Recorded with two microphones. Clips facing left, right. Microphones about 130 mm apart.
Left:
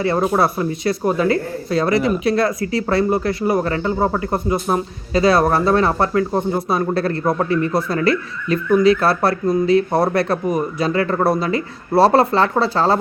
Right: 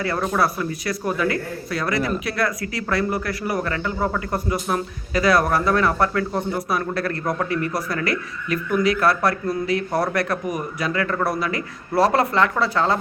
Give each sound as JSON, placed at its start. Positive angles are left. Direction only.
{"t": 0.3, "sound": "speech", "side_deg": 25}